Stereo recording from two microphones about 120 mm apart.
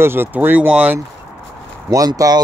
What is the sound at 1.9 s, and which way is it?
Speech, 30° right (ahead or behind).